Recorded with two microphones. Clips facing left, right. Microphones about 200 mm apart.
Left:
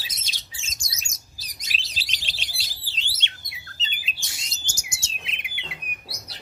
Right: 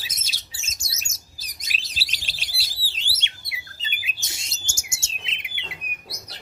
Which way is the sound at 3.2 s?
10° right (ahead or behind).